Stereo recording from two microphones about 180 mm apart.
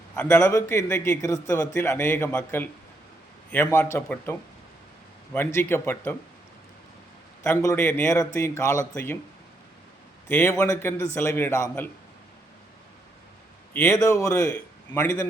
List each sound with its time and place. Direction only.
0.2 s a man's voice: 10° left (ahead or behind)
7.4 s a man's voice: 15° left (ahead or behind)
10.2 s a man's voice: 10° left (ahead or behind)
13.7 s a man's voice: 15° left (ahead or behind)